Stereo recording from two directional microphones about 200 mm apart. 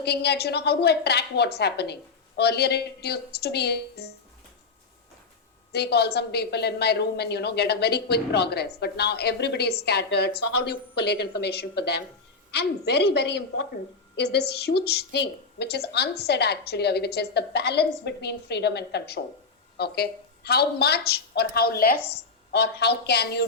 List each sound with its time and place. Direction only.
0.0 s a woman's voice: 55° left (ahead or behind)
5.7 s a woman's voice: 55° left (ahead or behind)